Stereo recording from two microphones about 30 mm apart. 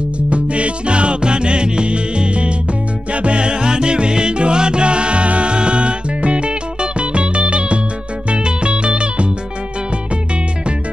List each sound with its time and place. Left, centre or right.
0.3 s music: right